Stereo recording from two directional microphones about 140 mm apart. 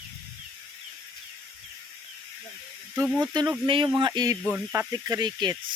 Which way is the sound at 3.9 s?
25° right (ahead or behind).